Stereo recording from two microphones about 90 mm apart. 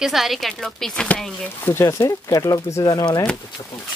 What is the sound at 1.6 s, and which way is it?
Speech, 25° left (ahead or behind).